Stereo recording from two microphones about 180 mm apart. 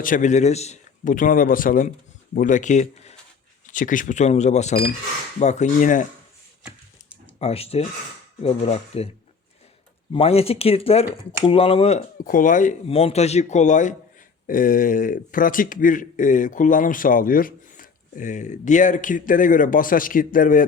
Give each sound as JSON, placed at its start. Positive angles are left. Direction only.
{"t": 0.0, "sound": "speech", "side_deg": 45}
{"t": 7.3, "sound": "speech", "side_deg": 35}
{"t": 10.1, "sound": "speech", "side_deg": 30}
{"t": 12.2, "sound": "speech", "side_deg": 50}
{"t": 12.9, "sound": "speech", "side_deg": 35}